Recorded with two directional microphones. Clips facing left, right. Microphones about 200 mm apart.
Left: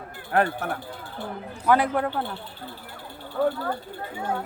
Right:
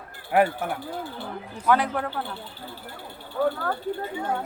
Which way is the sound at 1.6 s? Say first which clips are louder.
Left 2 dB; 10° left (ahead or behind).